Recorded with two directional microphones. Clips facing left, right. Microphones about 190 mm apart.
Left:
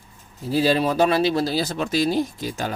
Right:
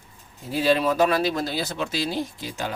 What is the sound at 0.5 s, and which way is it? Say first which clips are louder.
Speech: left 1 dB; 35° left (ahead or behind).